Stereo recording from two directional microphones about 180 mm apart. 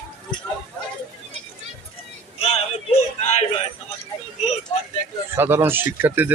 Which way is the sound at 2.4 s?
35° left (ahead or behind).